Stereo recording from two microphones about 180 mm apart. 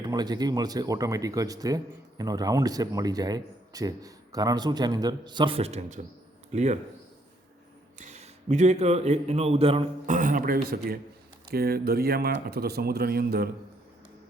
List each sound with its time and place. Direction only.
0.0 s speech: 20° right (ahead or behind); by 6.7 s 40° right (ahead or behind)
7.9 s a man's voice: 40° right (ahead or behind)
10.2 s a man's voice: 50° right (ahead or behind)